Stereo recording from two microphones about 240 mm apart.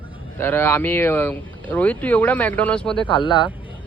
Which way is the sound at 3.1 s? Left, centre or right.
Centre.